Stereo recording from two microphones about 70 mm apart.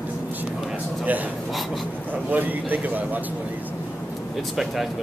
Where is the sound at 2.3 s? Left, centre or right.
Right.